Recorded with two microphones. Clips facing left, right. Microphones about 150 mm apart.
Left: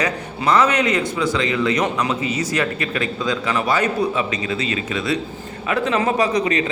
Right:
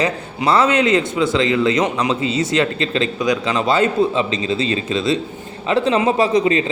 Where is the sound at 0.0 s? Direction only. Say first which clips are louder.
Right 2 dB; 30° right (ahead or behind).